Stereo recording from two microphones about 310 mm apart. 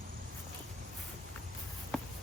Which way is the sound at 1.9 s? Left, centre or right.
Centre.